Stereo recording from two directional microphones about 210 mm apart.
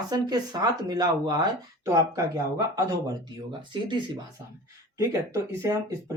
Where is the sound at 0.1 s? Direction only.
20° right (ahead or behind).